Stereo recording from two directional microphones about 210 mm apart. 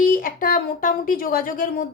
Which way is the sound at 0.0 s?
40° left (ahead or behind).